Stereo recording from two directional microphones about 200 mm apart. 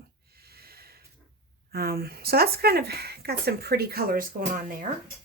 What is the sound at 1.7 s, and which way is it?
Speech, 50° right (ahead or behind).